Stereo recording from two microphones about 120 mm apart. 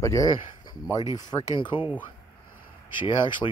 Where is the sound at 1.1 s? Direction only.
35° left (ahead or behind).